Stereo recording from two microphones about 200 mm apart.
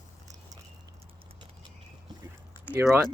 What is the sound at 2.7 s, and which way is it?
Speech, 10° right (ahead or behind).